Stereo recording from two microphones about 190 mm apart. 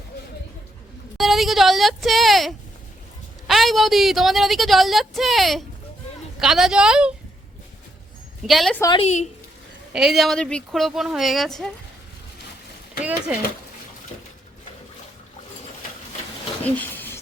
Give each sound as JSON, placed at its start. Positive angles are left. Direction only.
{"t": 1.2, "sound": "a woman's voice", "side_deg": 0}
{"t": 8.4, "sound": "a woman's voice", "side_deg": 0}
{"t": 9.0, "sound": "speech", "side_deg": 35}
{"t": 9.9, "sound": "a woman's voice", "side_deg": 0}
{"t": 13.0, "sound": "speech", "side_deg": -5}
{"t": 16.6, "sound": "a sound", "side_deg": 10}